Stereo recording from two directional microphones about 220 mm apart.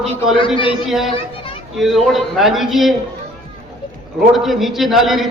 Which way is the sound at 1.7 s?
Centre (ahead or behind).